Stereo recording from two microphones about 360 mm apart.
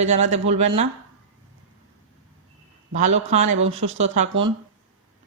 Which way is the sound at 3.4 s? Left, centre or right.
Right.